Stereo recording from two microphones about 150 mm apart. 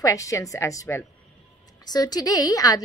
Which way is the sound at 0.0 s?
20° left (ahead or behind).